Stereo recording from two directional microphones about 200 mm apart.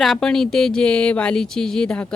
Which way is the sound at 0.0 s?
Centre (ahead or behind).